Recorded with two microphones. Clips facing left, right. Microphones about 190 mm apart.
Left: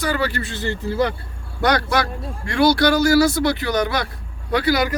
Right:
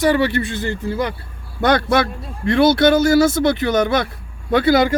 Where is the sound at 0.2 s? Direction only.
20° right (ahead or behind).